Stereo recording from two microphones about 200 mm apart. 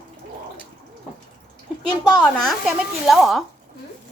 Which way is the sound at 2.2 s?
Centre (ahead or behind).